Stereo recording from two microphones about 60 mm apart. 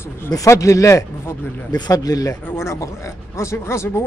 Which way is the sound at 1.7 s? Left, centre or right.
Left.